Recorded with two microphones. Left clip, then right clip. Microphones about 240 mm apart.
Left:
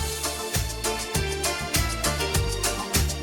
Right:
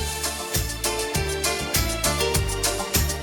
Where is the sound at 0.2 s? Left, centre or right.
Centre.